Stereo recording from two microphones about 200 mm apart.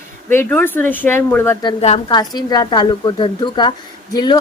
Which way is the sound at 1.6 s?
25° left (ahead or behind).